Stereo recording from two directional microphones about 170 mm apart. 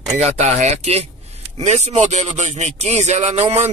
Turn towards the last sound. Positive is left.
turn(degrees=-40)  # may be behind; listen again after turning